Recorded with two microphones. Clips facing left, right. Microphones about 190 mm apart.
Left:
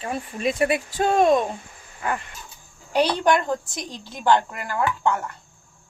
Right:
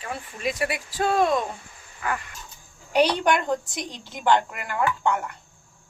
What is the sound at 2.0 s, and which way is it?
Dog, 30° left (ahead or behind).